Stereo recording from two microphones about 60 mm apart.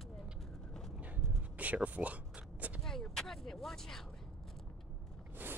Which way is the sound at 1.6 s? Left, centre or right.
Right.